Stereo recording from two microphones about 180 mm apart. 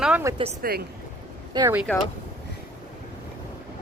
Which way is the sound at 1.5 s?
15° right (ahead or behind).